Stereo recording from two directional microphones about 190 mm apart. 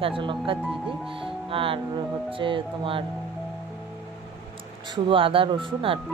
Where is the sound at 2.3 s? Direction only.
25° right (ahead or behind).